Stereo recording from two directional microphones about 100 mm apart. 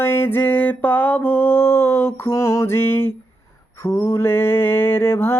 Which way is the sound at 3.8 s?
25° left (ahead or behind).